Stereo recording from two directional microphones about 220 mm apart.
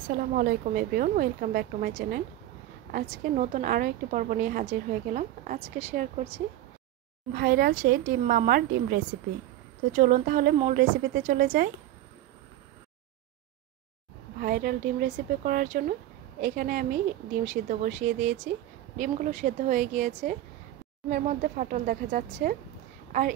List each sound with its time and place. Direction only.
0.3 s a woman's voice: 45° right (ahead or behind)
7.3 s a woman's voice: 40° right (ahead or behind)
14.4 s a woman's voice: 40° right (ahead or behind)